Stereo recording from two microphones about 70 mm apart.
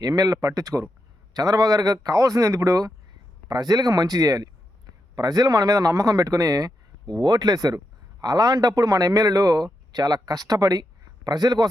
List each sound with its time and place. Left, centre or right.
0.0 s speech: right
1.3 s speech: right
3.5 s speech: right
7.1 s speech: right